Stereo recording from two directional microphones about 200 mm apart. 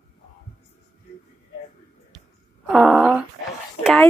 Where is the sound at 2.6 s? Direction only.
Centre (ahead or behind).